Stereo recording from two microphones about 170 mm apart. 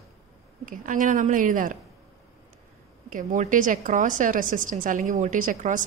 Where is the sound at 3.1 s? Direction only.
50° right (ahead or behind).